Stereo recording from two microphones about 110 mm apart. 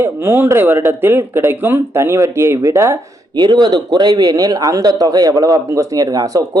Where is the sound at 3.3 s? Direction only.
40° right (ahead or behind).